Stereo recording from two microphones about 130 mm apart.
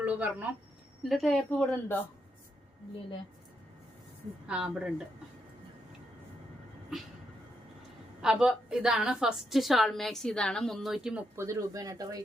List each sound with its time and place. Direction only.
0.0 s speech: 10° right (ahead or behind)
1.0 s a woman's voice: centre (ahead or behind)
4.4 s a woman's voice: 5° right (ahead or behind)
6.9 s a woman's voice: 5° right (ahead or behind)
8.2 s a woman's voice: 5° right (ahead or behind)
11.4 s speech: 25° right (ahead or behind)